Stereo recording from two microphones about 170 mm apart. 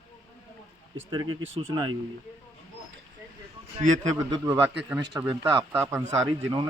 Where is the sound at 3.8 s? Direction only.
45° right (ahead or behind).